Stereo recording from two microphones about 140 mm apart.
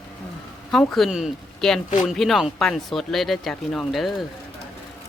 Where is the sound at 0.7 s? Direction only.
Centre (ahead or behind).